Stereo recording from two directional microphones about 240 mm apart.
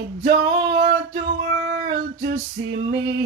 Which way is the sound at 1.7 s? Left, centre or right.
Right.